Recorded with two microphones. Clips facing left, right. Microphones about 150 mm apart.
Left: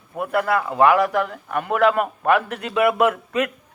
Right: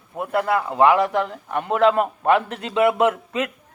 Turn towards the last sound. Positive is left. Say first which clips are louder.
# left 1 dB
turn(degrees=-25)  # may be behind; listen again after turning